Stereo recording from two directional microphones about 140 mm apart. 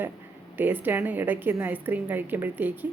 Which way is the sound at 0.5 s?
15° right (ahead or behind).